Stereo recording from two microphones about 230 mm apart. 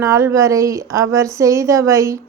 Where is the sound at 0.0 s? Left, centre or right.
Centre.